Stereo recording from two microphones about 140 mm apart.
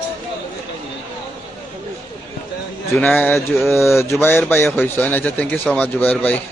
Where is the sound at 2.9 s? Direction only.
10° left (ahead or behind).